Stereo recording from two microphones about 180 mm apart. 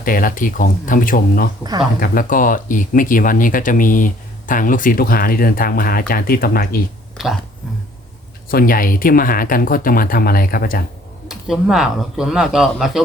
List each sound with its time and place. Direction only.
0.0 s speech: 50° left (ahead or behind)
7.2 s speech: centre (ahead or behind)
8.4 s speech: 55° left (ahead or behind)
11.3 s speech: centre (ahead or behind)